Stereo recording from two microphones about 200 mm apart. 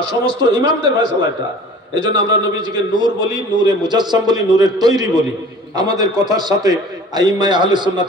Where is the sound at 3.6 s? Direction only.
20° right (ahead or behind).